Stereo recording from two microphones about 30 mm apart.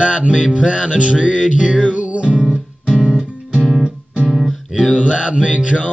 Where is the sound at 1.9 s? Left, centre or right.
Right.